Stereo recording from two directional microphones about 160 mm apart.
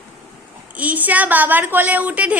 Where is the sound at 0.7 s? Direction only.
10° right (ahead or behind).